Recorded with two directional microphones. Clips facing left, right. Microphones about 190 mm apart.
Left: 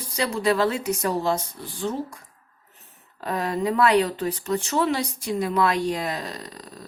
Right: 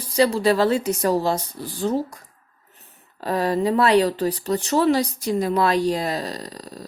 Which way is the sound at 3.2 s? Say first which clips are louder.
Right 4 dB; 35° right (ahead or behind).